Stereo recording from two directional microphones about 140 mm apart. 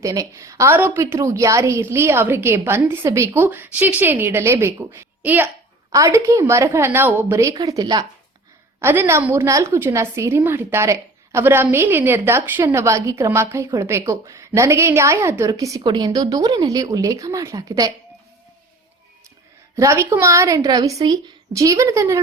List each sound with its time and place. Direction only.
0.0 s a woman's voice: 25° right (ahead or behind)
8.8 s a woman's voice: 15° right (ahead or behind)
19.7 s a woman's voice: 20° right (ahead or behind)